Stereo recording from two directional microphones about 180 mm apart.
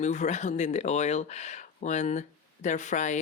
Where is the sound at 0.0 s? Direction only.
40° left (ahead or behind).